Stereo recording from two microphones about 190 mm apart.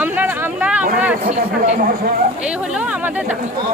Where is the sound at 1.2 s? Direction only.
35° right (ahead or behind).